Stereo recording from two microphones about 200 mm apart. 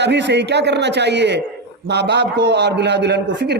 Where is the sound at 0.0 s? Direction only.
60° right (ahead or behind).